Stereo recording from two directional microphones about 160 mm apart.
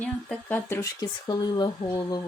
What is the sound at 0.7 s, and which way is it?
Speech, 20° left (ahead or behind).